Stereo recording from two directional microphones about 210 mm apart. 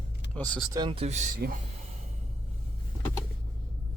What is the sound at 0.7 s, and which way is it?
Speech, 20° right (ahead or behind).